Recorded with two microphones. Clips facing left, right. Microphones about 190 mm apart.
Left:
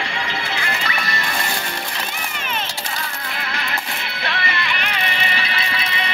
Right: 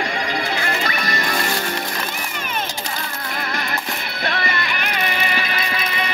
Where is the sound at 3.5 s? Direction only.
45° right (ahead or behind).